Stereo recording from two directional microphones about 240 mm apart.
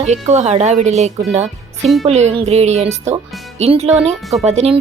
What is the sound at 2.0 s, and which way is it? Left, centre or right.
Speech, right.